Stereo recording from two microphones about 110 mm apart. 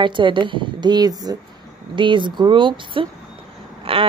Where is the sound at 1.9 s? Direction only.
45° right (ahead or behind).